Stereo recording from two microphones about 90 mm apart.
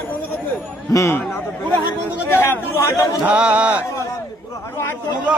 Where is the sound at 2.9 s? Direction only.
35° left (ahead or behind).